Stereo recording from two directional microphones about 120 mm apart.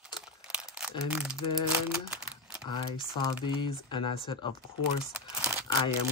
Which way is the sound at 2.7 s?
40° left (ahead or behind).